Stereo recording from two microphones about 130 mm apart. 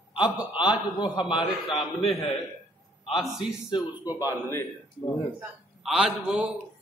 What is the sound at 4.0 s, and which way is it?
Speech, 15° right (ahead or behind).